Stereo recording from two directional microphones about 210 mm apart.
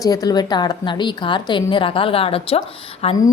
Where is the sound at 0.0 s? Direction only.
15° left (ahead or behind).